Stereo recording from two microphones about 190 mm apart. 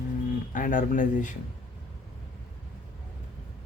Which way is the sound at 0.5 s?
45° left (ahead or behind).